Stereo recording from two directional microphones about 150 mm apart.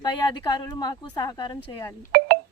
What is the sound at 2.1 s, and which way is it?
Telephone dialing, 90° right.